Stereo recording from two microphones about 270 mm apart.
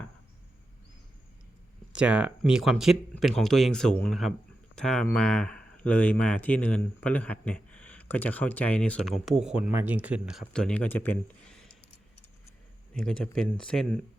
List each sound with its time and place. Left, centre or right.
2.0 s speech: centre
12.9 s speech: centre